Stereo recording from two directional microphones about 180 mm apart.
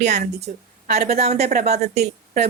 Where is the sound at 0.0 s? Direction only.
40° right (ahead or behind).